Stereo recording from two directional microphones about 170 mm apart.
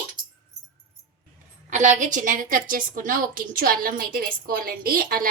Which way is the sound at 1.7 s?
45° right (ahead or behind).